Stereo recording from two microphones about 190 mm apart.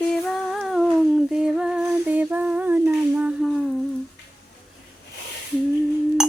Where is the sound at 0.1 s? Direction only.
Centre (ahead or behind).